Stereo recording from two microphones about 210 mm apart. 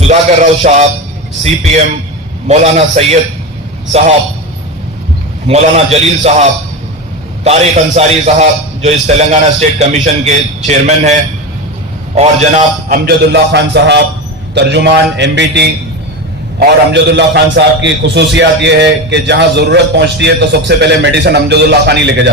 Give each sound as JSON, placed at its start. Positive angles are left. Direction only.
{"t": 0.0, "sound": "a man's voice", "side_deg": -30}
{"t": 2.5, "sound": "a man's voice", "side_deg": -30}
{"t": 5.5, "sound": "a man's voice", "side_deg": -30}
{"t": 12.1, "sound": "a man's voice", "side_deg": -30}